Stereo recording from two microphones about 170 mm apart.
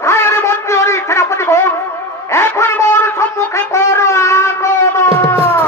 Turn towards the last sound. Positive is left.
turn(degrees=15)  # may be behind; listen again after turning